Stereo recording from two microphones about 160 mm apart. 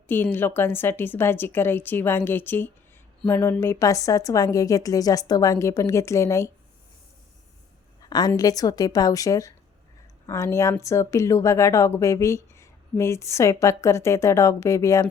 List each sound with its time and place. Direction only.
0.1 s a woman's voice: 15° left (ahead or behind)
8.0 s a sound: 25° left (ahead or behind)
8.4 s speech: 20° left (ahead or behind)